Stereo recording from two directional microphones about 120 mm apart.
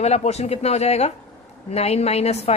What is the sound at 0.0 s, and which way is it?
A woman's voice, 65° left (ahead or behind).